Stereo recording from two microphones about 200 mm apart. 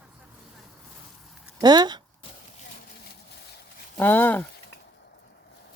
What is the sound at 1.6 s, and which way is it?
Speech, 20° right (ahead or behind).